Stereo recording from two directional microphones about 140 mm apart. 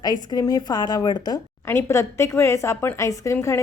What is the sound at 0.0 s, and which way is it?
Speech, 30° left (ahead or behind).